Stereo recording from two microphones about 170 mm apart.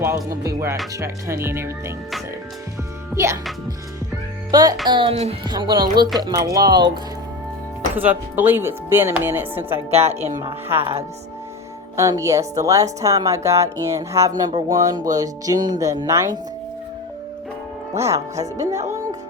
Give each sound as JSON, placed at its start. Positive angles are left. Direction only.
{"t": 0.0, "sound": "speech", "side_deg": -20}
{"t": 3.2, "sound": "speech", "side_deg": -20}
{"t": 4.5, "sound": "speech", "side_deg": -20}
{"t": 5.5, "sound": "speech", "side_deg": -25}
{"t": 7.9, "sound": "speech", "side_deg": -10}
{"t": 9.9, "sound": "speech", "side_deg": -40}
{"t": 11.9, "sound": "speech", "side_deg": -20}
{"t": 17.9, "sound": "speech", "side_deg": -15}